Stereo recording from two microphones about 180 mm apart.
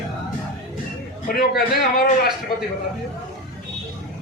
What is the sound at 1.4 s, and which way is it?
Speech, 50° left (ahead or behind).